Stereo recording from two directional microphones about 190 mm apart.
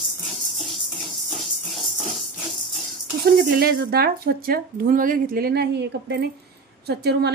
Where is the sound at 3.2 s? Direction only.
55° right (ahead or behind).